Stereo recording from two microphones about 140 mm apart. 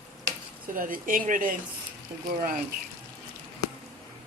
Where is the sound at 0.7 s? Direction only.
75° right (ahead or behind).